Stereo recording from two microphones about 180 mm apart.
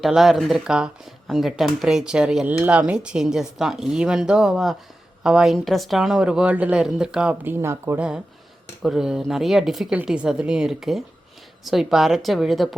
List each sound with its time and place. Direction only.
0.0 s speech: centre (ahead or behind)